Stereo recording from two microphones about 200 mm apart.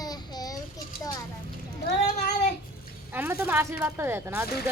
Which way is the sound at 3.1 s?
10° right (ahead or behind).